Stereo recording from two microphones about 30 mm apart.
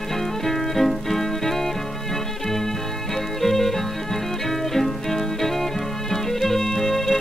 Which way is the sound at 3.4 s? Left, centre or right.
Centre.